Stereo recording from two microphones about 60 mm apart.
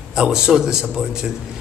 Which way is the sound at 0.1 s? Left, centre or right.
Centre.